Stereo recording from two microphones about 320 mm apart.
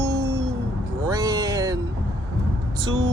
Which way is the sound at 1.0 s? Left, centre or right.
Centre.